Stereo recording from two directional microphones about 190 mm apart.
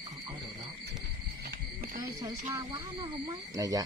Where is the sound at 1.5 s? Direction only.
50° right (ahead or behind).